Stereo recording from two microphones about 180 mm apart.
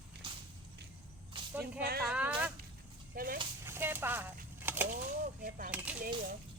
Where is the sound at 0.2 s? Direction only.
30° right (ahead or behind).